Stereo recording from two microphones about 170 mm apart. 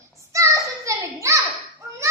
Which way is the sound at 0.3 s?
20° right (ahead or behind).